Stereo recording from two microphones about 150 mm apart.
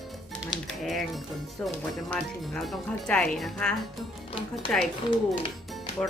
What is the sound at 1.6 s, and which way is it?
Speech, 5° left (ahead or behind).